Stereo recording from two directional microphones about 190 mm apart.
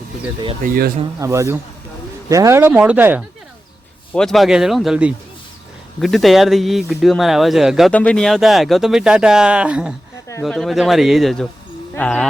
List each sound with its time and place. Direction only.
0.6 s speech: 50° right (ahead or behind)
1.2 s speech: 15° right (ahead or behind)
4.1 s speech: centre (ahead or behind)